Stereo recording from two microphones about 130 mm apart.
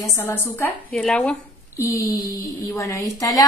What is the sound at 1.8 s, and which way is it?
A woman's voice, 25° left (ahead or behind).